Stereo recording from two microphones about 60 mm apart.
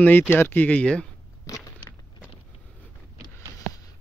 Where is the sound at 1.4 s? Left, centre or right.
Left.